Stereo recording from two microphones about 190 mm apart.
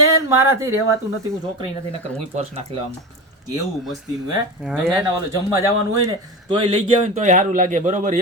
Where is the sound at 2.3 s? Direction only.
35° right (ahead or behind).